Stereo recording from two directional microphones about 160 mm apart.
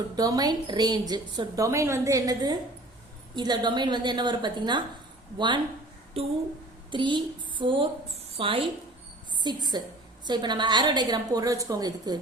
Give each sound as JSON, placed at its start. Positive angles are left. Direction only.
{"t": 0.2, "sound": "a woman's voice", "side_deg": -25}
{"t": 6.2, "sound": "a woman's voice", "side_deg": -40}